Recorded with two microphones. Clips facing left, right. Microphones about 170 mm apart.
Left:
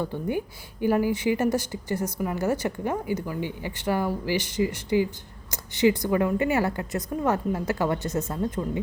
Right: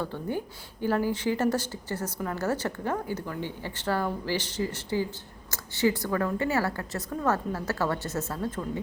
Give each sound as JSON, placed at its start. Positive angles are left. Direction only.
{"t": 0.0, "sound": "a woman's voice", "side_deg": 15}